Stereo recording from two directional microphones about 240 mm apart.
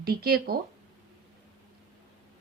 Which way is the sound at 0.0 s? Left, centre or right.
Right.